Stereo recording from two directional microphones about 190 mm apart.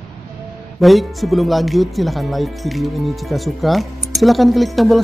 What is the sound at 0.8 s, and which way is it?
Speech, centre (ahead or behind).